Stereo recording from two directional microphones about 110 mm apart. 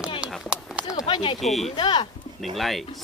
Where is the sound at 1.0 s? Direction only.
45° left (ahead or behind).